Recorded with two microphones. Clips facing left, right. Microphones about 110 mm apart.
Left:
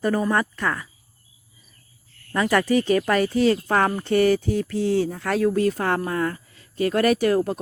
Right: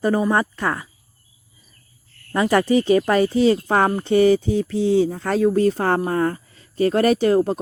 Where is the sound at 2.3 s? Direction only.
30° right (ahead or behind).